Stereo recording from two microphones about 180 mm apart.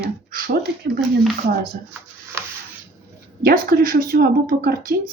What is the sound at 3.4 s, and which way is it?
A woman's voice, 55° right (ahead or behind).